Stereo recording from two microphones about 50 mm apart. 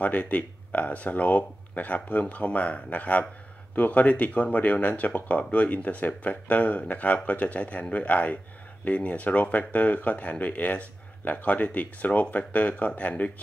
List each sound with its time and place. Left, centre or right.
0.0 s speech: left